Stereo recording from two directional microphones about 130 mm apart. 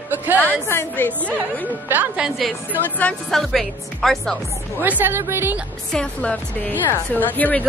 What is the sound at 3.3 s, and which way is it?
Speech, centre (ahead or behind).